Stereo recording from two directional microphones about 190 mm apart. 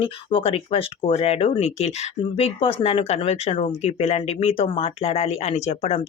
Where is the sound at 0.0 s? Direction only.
25° left (ahead or behind).